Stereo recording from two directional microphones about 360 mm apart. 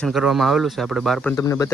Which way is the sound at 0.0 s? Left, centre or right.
Centre.